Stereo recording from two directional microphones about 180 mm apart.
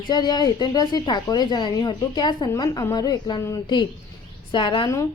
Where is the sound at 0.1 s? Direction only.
20° left (ahead or behind).